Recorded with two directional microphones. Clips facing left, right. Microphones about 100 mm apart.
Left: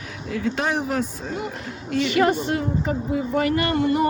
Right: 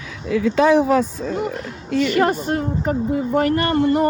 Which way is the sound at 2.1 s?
40° right (ahead or behind).